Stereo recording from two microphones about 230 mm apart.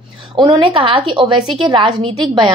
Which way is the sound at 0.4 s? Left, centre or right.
Right.